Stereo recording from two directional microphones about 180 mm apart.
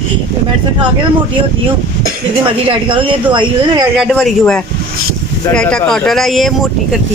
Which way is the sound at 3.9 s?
Centre (ahead or behind).